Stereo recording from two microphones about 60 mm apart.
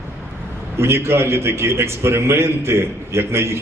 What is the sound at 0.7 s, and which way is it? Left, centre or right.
A man's voice, right.